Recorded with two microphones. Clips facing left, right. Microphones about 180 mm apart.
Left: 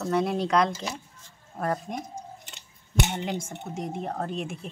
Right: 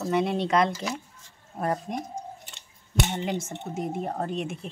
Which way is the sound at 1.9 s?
Centre (ahead or behind).